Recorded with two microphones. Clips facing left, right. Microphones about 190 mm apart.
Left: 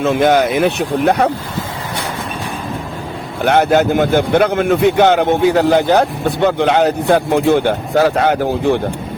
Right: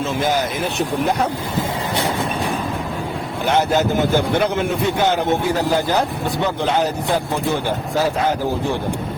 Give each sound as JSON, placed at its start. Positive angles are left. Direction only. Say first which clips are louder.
{"t": 0.0, "sound": "a man's voice", "louder": "left 8 dB", "side_deg": 65}
{"t": 3.4, "sound": "a man's voice", "louder": "left 6 dB", "side_deg": 60}